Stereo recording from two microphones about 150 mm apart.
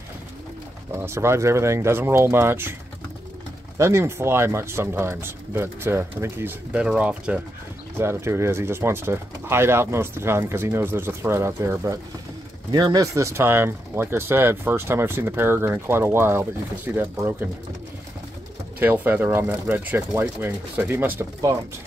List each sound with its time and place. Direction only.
0.9 s speech: 15° right (ahead or behind)
3.7 s speech: 20° right (ahead or behind)
18.8 s speech: 15° right (ahead or behind)